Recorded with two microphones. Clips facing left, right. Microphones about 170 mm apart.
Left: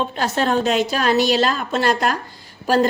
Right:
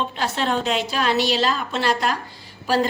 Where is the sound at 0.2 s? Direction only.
45° left (ahead or behind).